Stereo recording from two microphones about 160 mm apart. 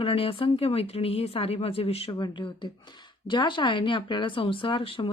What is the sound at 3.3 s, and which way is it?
Speech, 30° left (ahead or behind).